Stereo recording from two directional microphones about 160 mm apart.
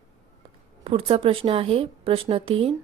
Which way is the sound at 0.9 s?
35° right (ahead or behind).